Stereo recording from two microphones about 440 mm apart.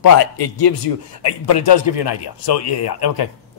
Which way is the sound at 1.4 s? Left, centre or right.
Left.